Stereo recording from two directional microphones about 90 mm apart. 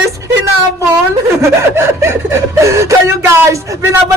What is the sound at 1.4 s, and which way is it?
Speech, 30° right (ahead or behind).